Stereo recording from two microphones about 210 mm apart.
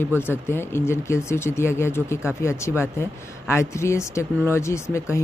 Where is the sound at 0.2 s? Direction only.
10° left (ahead or behind).